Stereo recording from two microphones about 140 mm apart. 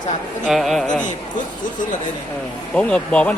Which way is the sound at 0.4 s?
Centre (ahead or behind).